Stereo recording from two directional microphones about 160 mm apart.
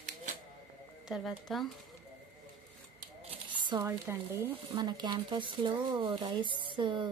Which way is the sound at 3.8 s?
15° right (ahead or behind).